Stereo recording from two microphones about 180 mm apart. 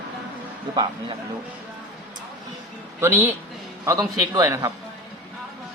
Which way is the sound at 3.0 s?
10° right (ahead or behind).